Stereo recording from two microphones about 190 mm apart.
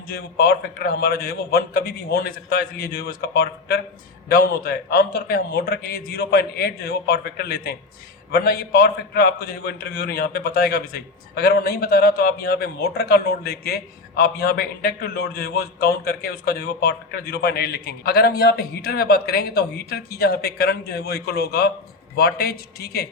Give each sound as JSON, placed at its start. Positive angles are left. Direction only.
{"t": 0.1, "sound": "a man's voice", "side_deg": 55}